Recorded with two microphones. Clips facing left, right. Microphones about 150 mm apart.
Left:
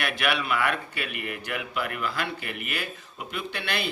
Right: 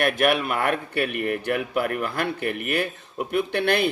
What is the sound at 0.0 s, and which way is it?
A man's voice, 45° right (ahead or behind).